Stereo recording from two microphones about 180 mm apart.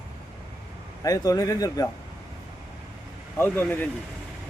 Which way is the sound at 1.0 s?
20° left (ahead or behind).